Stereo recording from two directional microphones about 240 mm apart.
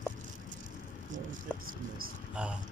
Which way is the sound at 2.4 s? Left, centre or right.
Centre.